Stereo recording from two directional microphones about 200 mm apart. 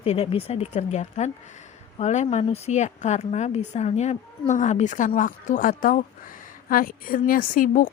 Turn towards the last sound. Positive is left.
turn(degrees=45)  # may be behind; listen again after turning